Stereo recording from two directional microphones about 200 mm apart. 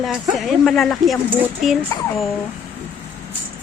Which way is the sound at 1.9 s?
20° left (ahead or behind).